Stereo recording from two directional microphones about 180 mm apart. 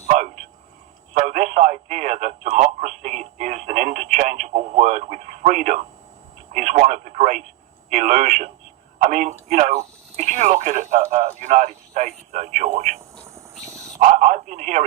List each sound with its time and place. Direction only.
1.1 s speech: 40° right (ahead or behind)
14.0 s speech: 40° right (ahead or behind)